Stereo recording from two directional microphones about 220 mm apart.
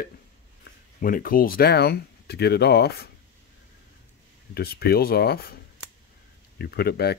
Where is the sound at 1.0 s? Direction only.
40° left (ahead or behind).